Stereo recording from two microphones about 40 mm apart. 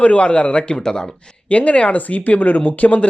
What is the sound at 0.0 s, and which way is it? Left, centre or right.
Speech, left.